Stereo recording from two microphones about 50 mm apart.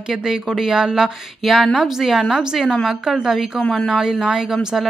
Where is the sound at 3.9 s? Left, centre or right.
Centre.